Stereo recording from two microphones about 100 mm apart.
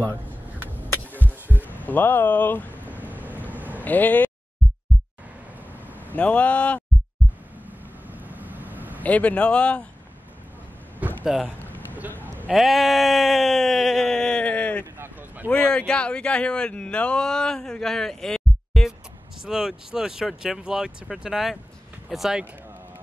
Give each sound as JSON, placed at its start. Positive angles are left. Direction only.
{"t": 1.7, "sound": "speech", "side_deg": 20}
{"t": 3.1, "sound": "vehicle", "side_deg": -15}
{"t": 3.8, "sound": "speech", "side_deg": 15}
{"t": 6.1, "sound": "speech", "side_deg": 15}
{"t": 8.1, "sound": "vehicle", "side_deg": -15}
{"t": 9.0, "sound": "speech", "side_deg": 15}
{"t": 11.0, "sound": "a sound", "side_deg": -15}
{"t": 12.4, "sound": "a sound", "side_deg": 0}
{"t": 15.4, "sound": "speech", "side_deg": 15}